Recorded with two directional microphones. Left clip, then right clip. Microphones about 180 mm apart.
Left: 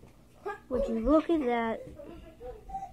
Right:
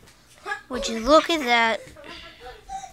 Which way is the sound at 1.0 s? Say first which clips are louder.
Right 10 dB; 30° right (ahead or behind).